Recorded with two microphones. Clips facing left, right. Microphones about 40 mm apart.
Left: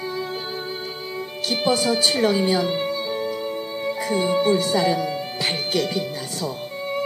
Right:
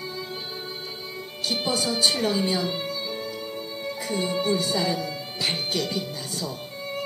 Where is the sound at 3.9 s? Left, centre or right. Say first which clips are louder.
Left 6 dB; left.